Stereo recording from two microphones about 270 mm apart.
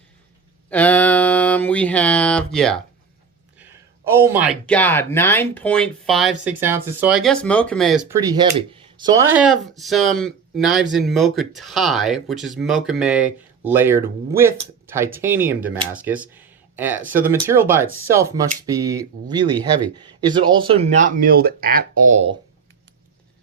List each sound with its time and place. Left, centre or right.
0.7 s mantra: centre
4.1 s speech: centre
4.6 s speech: centre
8.1 s speech: centre